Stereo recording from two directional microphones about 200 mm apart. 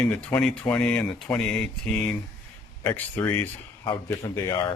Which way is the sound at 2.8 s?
10° left (ahead or behind).